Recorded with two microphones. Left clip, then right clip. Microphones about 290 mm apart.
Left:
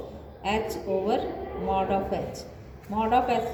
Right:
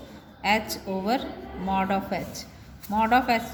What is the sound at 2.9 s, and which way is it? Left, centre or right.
Speech, right.